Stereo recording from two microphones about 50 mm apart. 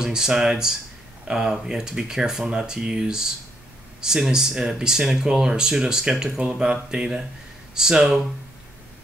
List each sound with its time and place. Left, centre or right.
0.0 s speech: centre